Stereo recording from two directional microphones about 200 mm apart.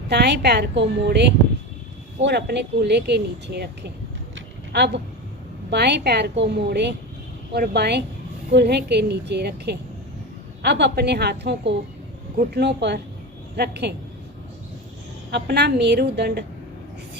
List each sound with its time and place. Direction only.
0.1 s speech: 55° right (ahead or behind)
2.2 s speech: 55° right (ahead or behind)
4.4 s a sound: 55° right (ahead or behind)
5.7 s speech: 55° right (ahead or behind)
15.3 s speech: 55° right (ahead or behind)